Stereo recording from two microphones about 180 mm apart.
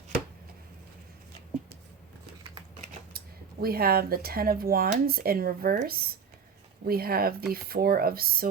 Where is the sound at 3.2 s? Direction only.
55° right (ahead or behind).